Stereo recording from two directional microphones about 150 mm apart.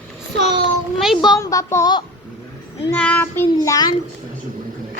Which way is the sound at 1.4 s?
20° left (ahead or behind).